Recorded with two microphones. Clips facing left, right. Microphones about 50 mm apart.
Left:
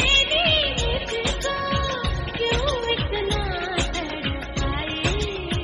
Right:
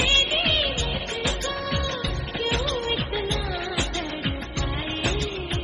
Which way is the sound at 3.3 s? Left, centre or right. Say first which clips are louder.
Left 3 dB; left.